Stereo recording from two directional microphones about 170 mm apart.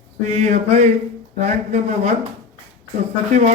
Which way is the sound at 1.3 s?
45° right (ahead or behind).